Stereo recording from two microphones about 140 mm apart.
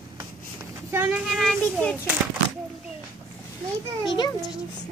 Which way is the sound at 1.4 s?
5° left (ahead or behind).